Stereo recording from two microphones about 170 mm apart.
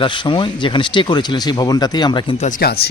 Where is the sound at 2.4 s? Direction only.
55° left (ahead or behind).